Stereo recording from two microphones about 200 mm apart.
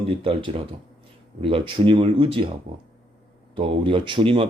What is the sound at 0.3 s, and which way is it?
Speech, 25° right (ahead or behind).